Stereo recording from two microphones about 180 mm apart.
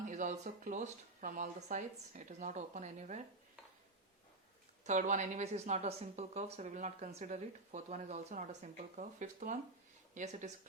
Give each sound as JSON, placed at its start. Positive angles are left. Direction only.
{"t": 0.1, "sound": "speech", "side_deg": -45}
{"t": 4.9, "sound": "speech", "side_deg": -45}